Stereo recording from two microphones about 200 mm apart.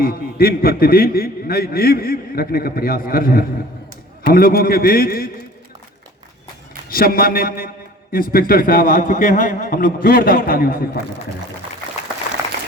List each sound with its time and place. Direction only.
0.0 s a man's voice: 50° left (ahead or behind)
6.9 s a man's voice: 45° left (ahead or behind)